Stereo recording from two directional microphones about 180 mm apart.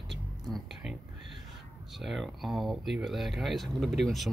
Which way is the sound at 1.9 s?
Centre (ahead or behind).